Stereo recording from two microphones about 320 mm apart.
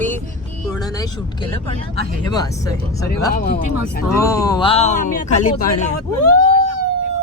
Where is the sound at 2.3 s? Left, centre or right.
Centre.